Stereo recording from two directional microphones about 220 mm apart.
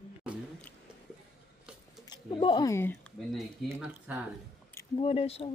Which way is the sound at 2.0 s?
20° left (ahead or behind).